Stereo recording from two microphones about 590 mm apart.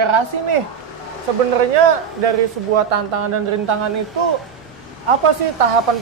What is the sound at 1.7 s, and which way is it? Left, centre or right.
A woman's voice, right.